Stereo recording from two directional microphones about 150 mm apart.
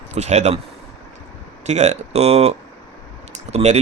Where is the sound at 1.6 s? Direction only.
50° right (ahead or behind).